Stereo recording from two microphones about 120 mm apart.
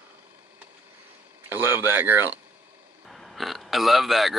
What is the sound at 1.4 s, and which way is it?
Speech, 20° right (ahead or behind).